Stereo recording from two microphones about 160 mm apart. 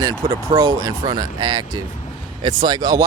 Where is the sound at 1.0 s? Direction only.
25° right (ahead or behind).